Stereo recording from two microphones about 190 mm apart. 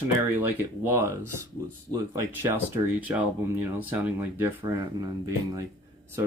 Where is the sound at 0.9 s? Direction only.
15° right (ahead or behind).